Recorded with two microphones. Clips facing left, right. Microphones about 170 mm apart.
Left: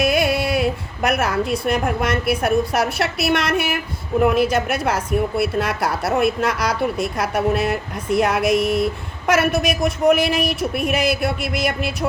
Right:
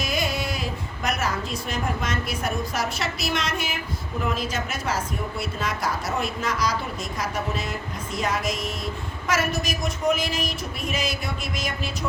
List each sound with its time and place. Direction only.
0.0 s a woman's voice: 65° left (ahead or behind)